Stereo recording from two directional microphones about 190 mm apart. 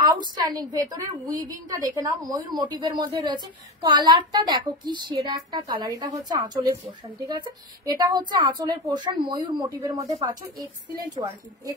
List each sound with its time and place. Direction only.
0.2 s a woman's voice: 20° right (ahead or behind)